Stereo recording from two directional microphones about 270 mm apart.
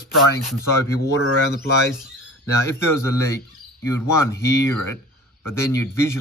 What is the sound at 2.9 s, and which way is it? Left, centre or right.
Speech, centre.